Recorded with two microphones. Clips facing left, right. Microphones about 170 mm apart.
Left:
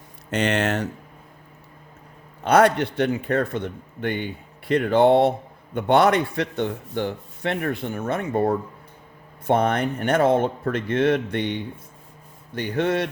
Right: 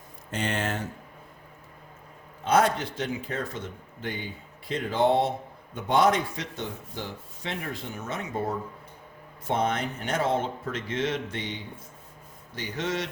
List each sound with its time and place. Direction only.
0.3 s speech: 75° left (ahead or behind)
2.4 s a man's voice: 70° left (ahead or behind)